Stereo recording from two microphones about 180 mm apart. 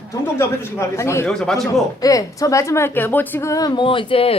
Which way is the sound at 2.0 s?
20° left (ahead or behind).